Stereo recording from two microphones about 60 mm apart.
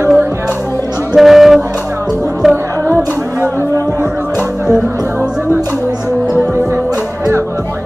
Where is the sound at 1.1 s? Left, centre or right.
Centre.